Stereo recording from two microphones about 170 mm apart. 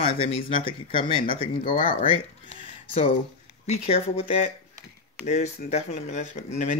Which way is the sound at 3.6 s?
40° left (ahead or behind).